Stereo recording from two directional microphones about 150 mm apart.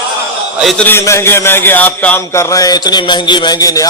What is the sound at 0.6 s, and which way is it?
Speech, centre (ahead or behind).